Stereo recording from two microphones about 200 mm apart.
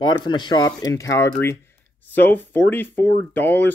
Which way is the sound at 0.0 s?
20° left (ahead or behind).